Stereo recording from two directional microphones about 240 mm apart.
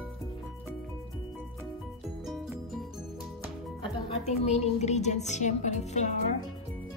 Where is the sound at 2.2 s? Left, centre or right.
Centre.